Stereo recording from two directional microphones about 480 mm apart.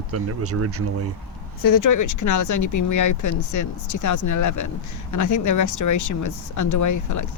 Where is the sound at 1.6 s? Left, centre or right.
Left.